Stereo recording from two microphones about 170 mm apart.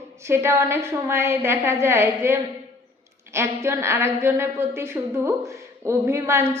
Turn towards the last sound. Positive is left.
turn(degrees=-15)  # may be behind; listen again after turning